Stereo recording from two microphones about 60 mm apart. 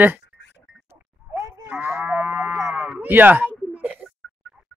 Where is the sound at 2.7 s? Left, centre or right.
Centre.